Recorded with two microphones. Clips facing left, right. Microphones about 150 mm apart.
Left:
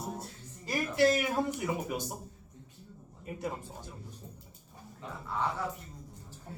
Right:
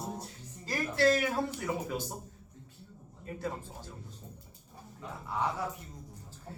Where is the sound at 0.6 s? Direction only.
15° left (ahead or behind).